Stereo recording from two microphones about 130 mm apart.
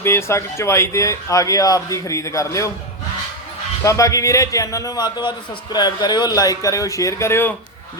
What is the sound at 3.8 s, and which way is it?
Speech, 25° left (ahead or behind).